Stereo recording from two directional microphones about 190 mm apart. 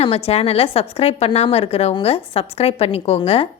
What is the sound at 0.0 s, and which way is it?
A woman's voice, 30° left (ahead or behind).